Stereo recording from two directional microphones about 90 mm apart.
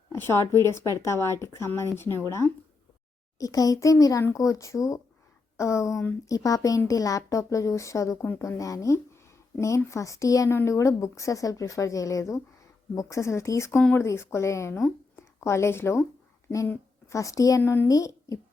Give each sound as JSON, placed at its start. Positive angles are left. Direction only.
{"t": 0.1, "sound": "a woman's voice", "side_deg": 30}
{"t": 3.3, "sound": "a woman's voice", "side_deg": 40}
{"t": 17.1, "sound": "a woman's voice", "side_deg": 35}
{"t": 17.6, "sound": "a woman's voice", "side_deg": 25}
{"t": 17.8, "sound": "speech", "side_deg": 40}